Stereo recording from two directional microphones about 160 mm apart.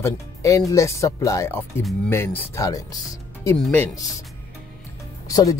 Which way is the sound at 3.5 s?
10° left (ahead or behind).